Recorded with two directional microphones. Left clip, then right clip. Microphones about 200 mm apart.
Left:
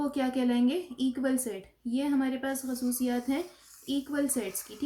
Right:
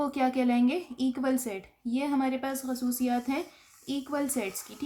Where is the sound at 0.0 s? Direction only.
40° right (ahead or behind).